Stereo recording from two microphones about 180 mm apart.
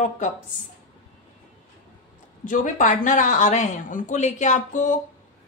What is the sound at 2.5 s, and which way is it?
A woman's voice, 45° left (ahead or behind).